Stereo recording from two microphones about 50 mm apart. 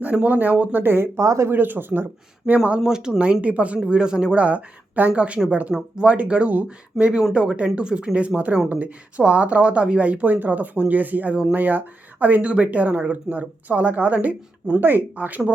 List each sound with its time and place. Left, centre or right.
0.0 s speech: right
1.2 s speech: right
1.5 s speech: right
2.5 s speech: right
2.8 s speech: centre
3.4 s speech: right
4.4 s a woman's voice: right
14.8 s speech: right
15.1 s speech: right